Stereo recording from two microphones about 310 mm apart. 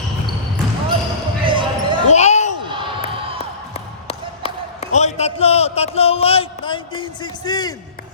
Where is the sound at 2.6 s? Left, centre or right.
Centre.